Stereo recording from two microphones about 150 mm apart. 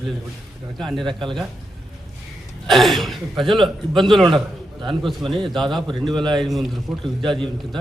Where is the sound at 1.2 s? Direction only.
Centre (ahead or behind).